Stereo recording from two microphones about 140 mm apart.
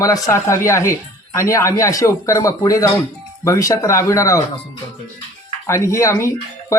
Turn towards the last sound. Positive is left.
turn(degrees=20)  # may be behind; listen again after turning